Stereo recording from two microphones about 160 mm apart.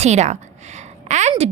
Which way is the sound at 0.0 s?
45° right (ahead or behind).